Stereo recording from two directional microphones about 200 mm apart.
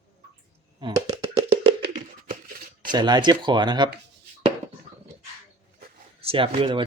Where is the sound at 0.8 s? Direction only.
20° right (ahead or behind).